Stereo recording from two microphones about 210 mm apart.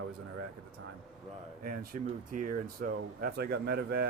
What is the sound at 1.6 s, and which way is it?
Speech, 40° right (ahead or behind).